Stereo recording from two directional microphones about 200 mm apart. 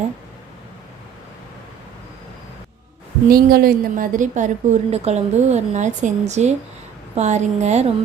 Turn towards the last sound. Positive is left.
turn(degrees=-35)  # may be behind; listen again after turning